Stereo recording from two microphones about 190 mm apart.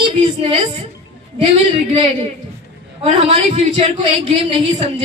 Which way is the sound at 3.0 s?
30° right (ahead or behind).